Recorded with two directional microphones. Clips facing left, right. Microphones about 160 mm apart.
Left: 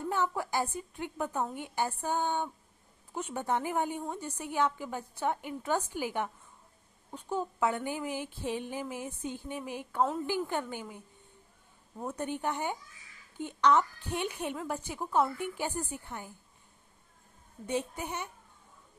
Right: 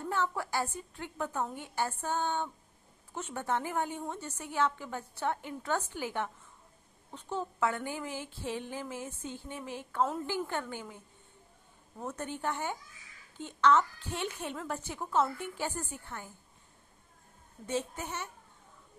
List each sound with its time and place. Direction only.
0.1 s a woman's voice: 15° left (ahead or behind)
12.0 s a woman's voice: 15° left (ahead or behind)
17.6 s a woman's voice: 15° left (ahead or behind)